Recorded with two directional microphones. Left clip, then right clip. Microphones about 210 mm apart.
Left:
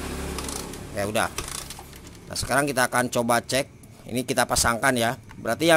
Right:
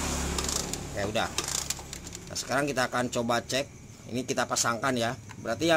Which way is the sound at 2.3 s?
20° left (ahead or behind).